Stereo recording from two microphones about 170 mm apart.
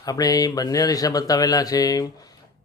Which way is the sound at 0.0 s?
20° left (ahead or behind).